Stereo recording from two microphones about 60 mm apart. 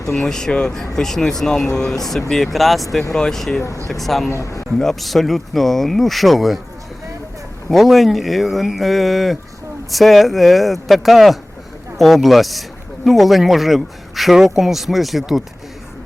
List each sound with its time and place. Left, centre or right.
0.1 s speech: centre
4.3 s speech: left
4.8 s speech: centre
7.7 s speech: centre